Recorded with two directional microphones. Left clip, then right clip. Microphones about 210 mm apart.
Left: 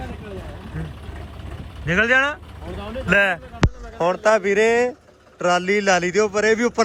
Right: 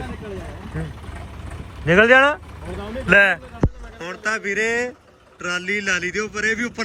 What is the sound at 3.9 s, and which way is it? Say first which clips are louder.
A man's voice: left 8 dB; 25° left (ahead or behind).